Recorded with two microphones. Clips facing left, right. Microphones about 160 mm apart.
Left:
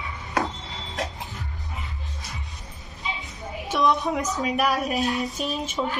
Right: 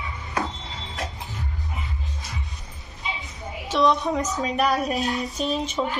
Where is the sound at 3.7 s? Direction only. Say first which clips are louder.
Right 2 dB; 20° right (ahead or behind).